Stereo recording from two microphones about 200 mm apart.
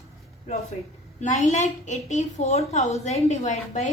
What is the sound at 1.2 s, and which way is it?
A woman's voice, 35° left (ahead or behind).